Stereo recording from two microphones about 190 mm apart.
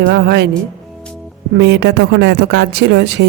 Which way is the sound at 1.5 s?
70° right (ahead or behind).